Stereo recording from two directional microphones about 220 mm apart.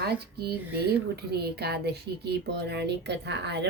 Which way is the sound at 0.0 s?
45° right (ahead or behind).